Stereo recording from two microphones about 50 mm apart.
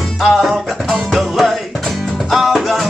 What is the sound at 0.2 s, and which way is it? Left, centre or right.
Music, centre.